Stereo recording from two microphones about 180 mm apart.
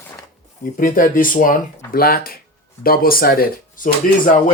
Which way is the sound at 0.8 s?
50° left (ahead or behind).